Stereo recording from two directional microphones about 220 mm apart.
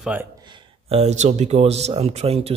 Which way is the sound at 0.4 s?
20° right (ahead or behind).